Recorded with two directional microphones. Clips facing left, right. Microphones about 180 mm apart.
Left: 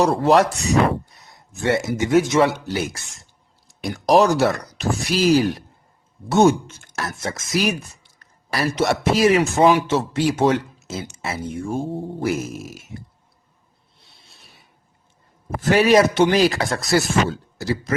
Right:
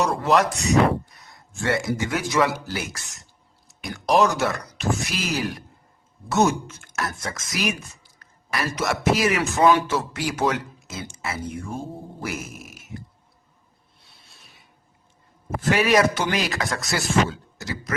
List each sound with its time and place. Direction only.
0.0 s speech: 35° left (ahead or behind)
1.2 s speech: 25° left (ahead or behind)
15.4 s speech: 35° left (ahead or behind)